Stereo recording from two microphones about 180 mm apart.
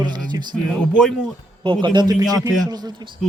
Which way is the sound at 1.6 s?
25° right (ahead or behind).